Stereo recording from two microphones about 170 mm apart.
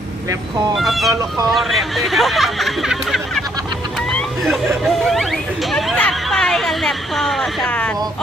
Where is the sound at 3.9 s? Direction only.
Centre (ahead or behind).